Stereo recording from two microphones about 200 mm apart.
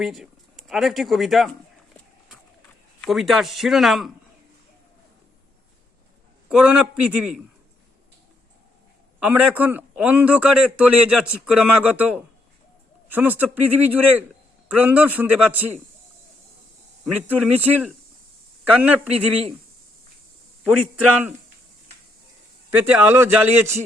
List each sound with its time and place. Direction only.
0.0 s speech: centre (ahead or behind)
3.0 s a man's voice: centre (ahead or behind)
6.5 s a man's voice: 5° right (ahead or behind)
9.2 s a man's voice: 10° right (ahead or behind)
17.2 s a man's voice: 10° right (ahead or behind)
18.7 s a man's voice: 10° right (ahead or behind)
20.7 s a man's voice: 5° right (ahead or behind)
22.7 s a man's voice: 10° right (ahead or behind)